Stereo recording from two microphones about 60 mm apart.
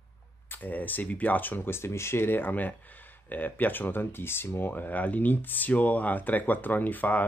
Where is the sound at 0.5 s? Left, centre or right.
Left.